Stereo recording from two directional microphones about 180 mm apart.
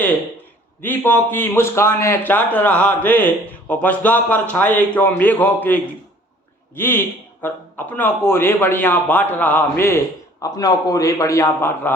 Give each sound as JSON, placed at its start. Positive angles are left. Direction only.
{"t": 0.8, "sound": "a man's voice", "side_deg": 10}